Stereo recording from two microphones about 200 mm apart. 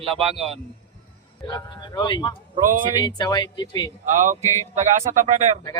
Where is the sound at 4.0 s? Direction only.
40° right (ahead or behind).